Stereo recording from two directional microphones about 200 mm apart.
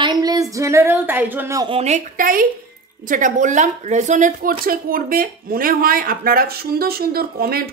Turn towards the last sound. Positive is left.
turn(degrees=-50)  # may be behind; listen again after turning